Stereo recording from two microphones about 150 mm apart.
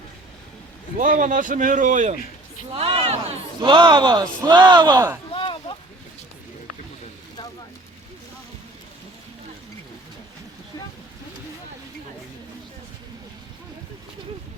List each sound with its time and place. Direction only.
0.9 s a man's voice: 65° right (ahead or behind)
2.7 s a man's voice: 40° right (ahead or behind)
5.3 s a sound: 35° left (ahead or behind)